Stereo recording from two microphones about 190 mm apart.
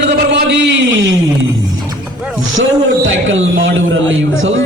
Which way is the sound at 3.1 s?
90° right.